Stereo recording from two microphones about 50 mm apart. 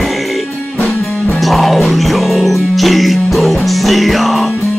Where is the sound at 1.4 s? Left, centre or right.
Centre.